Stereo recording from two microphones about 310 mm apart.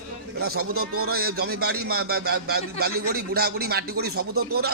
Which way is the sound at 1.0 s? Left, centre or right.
Right.